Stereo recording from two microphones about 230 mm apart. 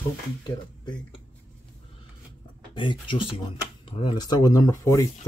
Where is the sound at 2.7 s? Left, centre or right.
Left.